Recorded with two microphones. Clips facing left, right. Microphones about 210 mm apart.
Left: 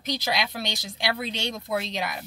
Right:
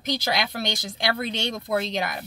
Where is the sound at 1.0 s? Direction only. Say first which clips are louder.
Right 2 dB; 55° right (ahead or behind).